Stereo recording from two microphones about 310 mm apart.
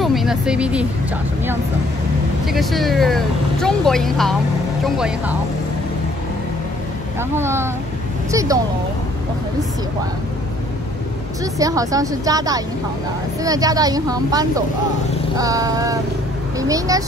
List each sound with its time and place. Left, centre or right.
0.0 s speech: centre
2.4 s speech: centre
7.2 s a woman's voice: centre
11.5 s speech: centre